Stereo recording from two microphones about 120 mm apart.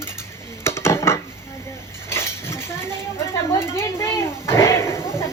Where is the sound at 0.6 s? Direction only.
20° left (ahead or behind).